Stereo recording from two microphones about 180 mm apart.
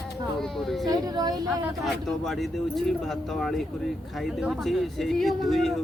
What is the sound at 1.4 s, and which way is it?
Speech, centre (ahead or behind).